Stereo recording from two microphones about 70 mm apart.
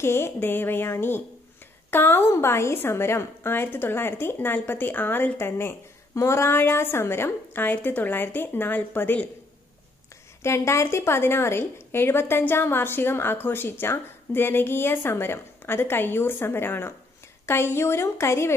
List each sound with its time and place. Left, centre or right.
0.0 s a woman's voice: left
10.4 s a woman's voice: left